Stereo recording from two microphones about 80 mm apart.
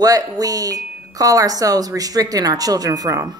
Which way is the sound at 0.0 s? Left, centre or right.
Right.